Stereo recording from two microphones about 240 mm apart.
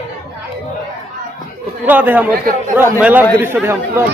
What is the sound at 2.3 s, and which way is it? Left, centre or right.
Speech, right.